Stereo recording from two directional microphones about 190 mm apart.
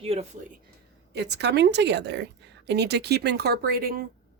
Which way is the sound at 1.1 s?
65° right (ahead or behind).